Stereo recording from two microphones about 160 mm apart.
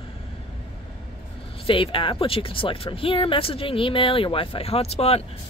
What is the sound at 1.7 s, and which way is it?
Speech, 35° left (ahead or behind).